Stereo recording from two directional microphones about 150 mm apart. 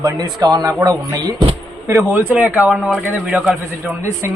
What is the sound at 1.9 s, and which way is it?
Speech, 15° right (ahead or behind).